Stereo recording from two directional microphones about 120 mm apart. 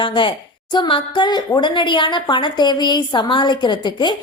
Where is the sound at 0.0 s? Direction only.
45° left (ahead or behind).